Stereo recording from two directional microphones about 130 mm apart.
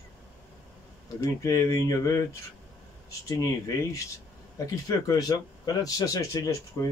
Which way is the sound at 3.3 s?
25° left (ahead or behind).